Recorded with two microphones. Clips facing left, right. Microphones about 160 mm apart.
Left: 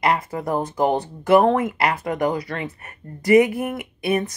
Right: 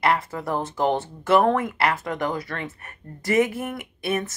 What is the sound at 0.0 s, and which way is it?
Speech, 15° left (ahead or behind).